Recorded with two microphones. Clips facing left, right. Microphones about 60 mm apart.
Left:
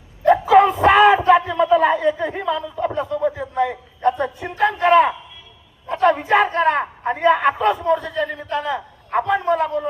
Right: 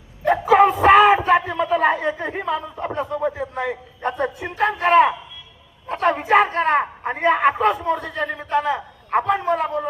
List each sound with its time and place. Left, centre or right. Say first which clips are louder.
0.6 s music: right 1 dB; centre
1.2 s a sound: left 3 dB; centre
1.7 s a man's voice: left 3 dB; centre